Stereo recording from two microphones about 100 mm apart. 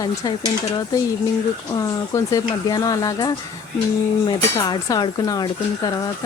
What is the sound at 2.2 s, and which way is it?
Speech, 40° left (ahead or behind).